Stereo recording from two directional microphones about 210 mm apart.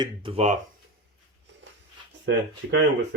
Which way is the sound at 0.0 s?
25° right (ahead or behind).